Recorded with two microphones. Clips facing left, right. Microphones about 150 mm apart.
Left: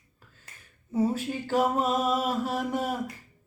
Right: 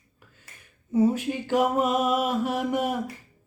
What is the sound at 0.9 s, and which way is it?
Mantra, 15° right (ahead or behind).